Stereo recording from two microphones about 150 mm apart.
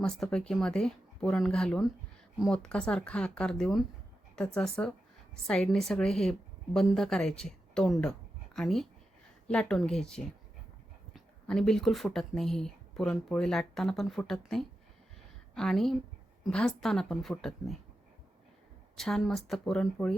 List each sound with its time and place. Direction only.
0.0 s speech: 5° left (ahead or behind)
18.9 s speech: centre (ahead or behind)